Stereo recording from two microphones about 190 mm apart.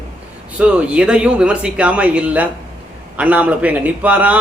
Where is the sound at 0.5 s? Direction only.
5° right (ahead or behind).